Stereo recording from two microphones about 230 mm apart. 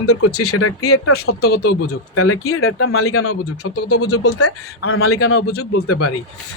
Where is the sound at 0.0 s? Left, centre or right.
Left.